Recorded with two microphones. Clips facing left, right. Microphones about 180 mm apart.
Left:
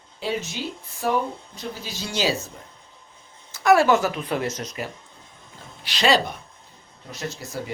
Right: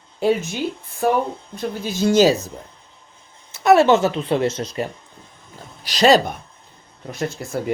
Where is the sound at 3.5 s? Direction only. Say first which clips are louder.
Right 4 dB; 25° right (ahead or behind).